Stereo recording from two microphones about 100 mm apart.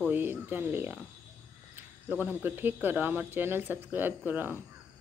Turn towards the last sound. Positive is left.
turn(degrees=-20)  # may be behind; listen again after turning